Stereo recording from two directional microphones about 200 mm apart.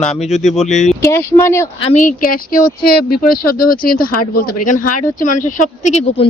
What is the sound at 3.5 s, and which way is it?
Speech, 45° left (ahead or behind).